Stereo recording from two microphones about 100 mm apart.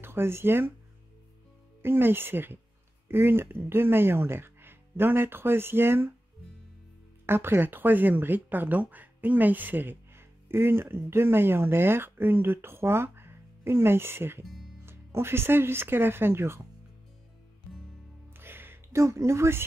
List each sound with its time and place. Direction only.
0.0 s speech: 25° right (ahead or behind)
1.8 s speech: 20° right (ahead or behind)
7.2 s speech: 20° right (ahead or behind)
14.4 s music: centre (ahead or behind)
14.9 s speech: 25° right (ahead or behind)
18.4 s a sound: 20° right (ahead or behind)